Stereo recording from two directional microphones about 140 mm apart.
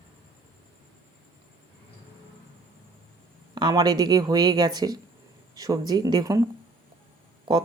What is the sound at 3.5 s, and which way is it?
Speech, 30° right (ahead or behind).